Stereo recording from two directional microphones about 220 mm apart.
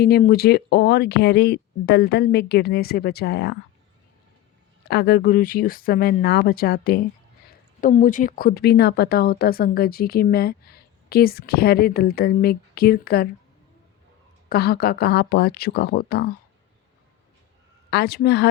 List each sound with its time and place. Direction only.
0.0 s a woman's voice: 45° left (ahead or behind)
4.9 s a woman's voice: 45° left (ahead or behind)
14.5 s a woman's voice: 45° left (ahead or behind)
17.9 s a woman's voice: 45° left (ahead or behind)